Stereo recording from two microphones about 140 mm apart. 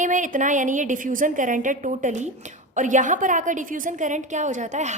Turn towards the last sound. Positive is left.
turn(degrees=-60)  # may be behind; listen again after turning